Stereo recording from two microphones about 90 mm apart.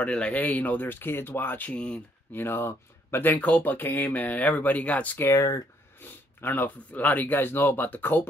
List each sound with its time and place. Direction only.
0.0 s speech: 15° left (ahead or behind)
5.3 s speech: 35° left (ahead or behind)
5.9 s speech: 25° left (ahead or behind)